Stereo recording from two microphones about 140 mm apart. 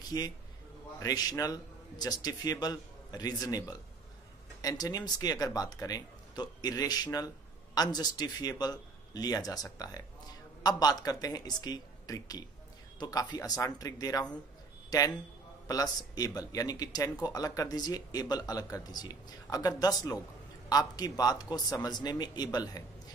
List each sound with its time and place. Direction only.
0.0 s a man's voice: 25° left (ahead or behind)